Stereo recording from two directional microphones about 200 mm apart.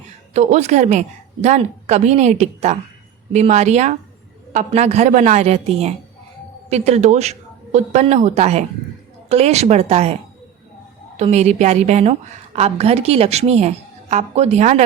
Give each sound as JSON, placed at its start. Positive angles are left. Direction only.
{"t": 0.3, "sound": "a woman's voice", "side_deg": -35}
{"t": 11.2, "sound": "a woman's voice", "side_deg": -35}